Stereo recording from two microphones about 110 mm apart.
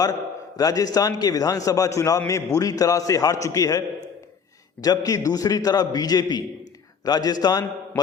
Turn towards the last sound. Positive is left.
turn(degrees=35)  # may be behind; listen again after turning